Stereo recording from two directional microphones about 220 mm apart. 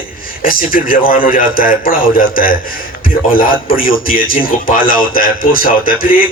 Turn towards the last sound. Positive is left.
turn(degrees=40)  # may be behind; listen again after turning